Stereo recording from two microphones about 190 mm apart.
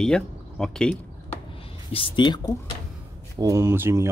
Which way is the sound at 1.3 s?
30° left (ahead or behind).